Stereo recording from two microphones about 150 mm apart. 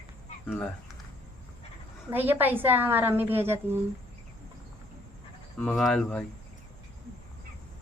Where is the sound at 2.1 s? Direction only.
15° right (ahead or behind).